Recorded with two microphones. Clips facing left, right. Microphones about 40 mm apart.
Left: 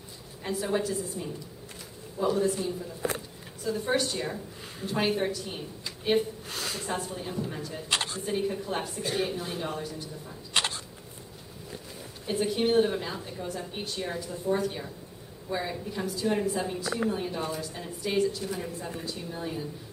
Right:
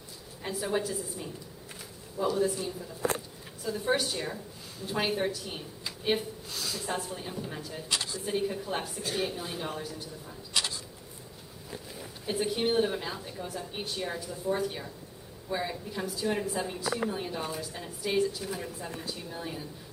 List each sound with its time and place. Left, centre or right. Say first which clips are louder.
0.4 s a woman's voice: left 2 dB; centre
2.2 s a man's voice: left 2 dB; centre
2.5 s a man's voice: left 3 dB; centre
6.5 s a sound: even; left
6.9 s a woman's voice: left 1 dB; centre
7.9 s a woman's voice: left 4 dB; left
8.3 s a woman's voice: even; centre
10.5 s a sound: left 4 dB; left
12.3 s a woman's voice: left 3 dB; centre